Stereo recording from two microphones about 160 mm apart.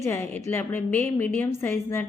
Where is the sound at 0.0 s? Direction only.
15° left (ahead or behind).